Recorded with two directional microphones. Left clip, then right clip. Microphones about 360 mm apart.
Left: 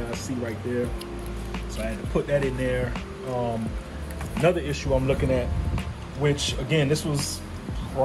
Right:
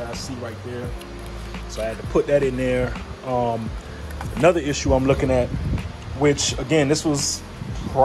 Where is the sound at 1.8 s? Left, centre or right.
Centre.